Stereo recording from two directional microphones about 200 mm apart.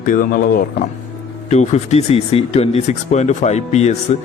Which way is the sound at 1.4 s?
35° left (ahead or behind).